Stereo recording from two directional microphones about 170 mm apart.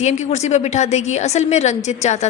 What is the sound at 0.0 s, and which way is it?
A woman's voice, 40° left (ahead or behind).